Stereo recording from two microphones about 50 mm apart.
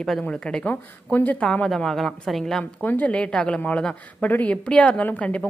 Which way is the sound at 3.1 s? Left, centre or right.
Left.